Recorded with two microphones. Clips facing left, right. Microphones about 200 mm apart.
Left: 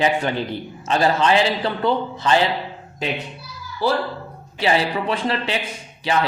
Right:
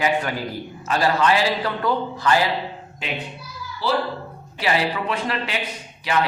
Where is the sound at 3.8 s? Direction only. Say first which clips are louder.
Left 3 dB; 50° left (ahead or behind).